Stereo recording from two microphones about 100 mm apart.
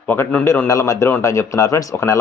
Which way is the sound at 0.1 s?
15° left (ahead or behind).